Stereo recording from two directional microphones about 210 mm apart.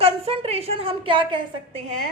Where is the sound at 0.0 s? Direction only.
30° right (ahead or behind).